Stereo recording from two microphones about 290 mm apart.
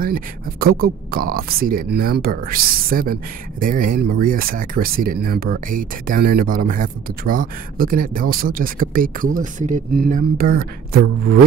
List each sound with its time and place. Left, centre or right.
0.0 s speech: right